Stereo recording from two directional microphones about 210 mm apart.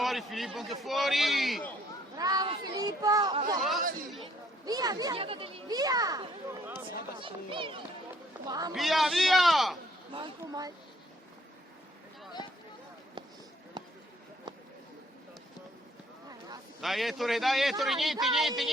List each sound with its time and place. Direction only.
0.0 s a man's voice: centre (ahead or behind)
2.1 s speech: 20° right (ahead or behind)
4.6 s a child's voice: 20° right (ahead or behind)
8.7 s a man's voice: centre (ahead or behind)
10.1 s speech: 20° right (ahead or behind)
13.8 s a sound: 20° right (ahead or behind)
16.8 s a man's voice: centre (ahead or behind)